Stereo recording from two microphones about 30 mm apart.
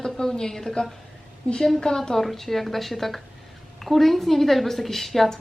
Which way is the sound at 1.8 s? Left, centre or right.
Left.